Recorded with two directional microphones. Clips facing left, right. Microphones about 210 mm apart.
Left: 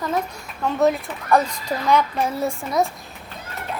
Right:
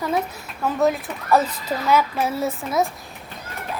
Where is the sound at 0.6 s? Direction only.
Centre (ahead or behind).